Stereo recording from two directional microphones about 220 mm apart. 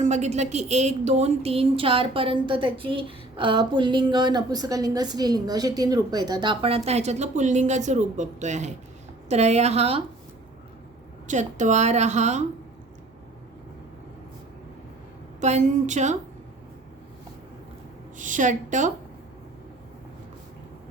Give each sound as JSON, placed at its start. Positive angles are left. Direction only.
{"t": 0.0, "sound": "a woman's voice", "side_deg": -30}
{"t": 11.3, "sound": "a woman's voice", "side_deg": -35}
{"t": 15.4, "sound": "a woman's voice", "side_deg": -30}
{"t": 18.2, "sound": "a woman's voice", "side_deg": -35}